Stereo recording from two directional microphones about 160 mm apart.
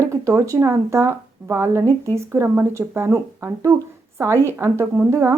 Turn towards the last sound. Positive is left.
turn(degrees=-15)  # may be behind; listen again after turning